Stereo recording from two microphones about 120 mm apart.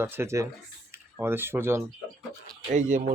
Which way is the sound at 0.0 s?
20° right (ahead or behind).